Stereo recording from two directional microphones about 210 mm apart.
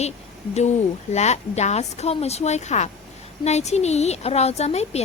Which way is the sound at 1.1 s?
30° left (ahead or behind).